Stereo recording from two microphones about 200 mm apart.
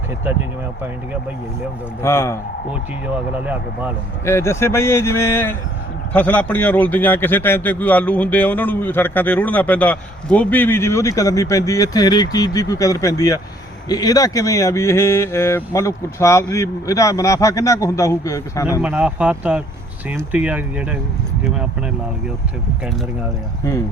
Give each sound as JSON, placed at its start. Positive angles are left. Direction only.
{"t": 2.0, "sound": "speech", "side_deg": 15}
{"t": 3.4, "sound": "speech", "side_deg": -10}
{"t": 4.3, "sound": "speech", "side_deg": 15}
{"t": 18.8, "sound": "speech", "side_deg": -5}